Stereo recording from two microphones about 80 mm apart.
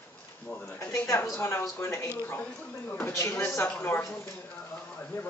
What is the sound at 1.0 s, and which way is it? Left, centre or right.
Speech, left.